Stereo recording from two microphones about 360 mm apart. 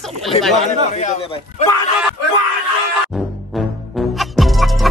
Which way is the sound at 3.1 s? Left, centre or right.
Centre.